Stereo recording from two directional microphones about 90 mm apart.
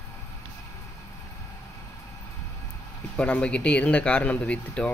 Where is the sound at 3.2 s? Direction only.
15° left (ahead or behind).